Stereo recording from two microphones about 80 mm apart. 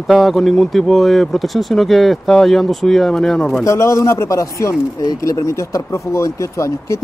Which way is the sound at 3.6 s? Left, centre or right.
Left.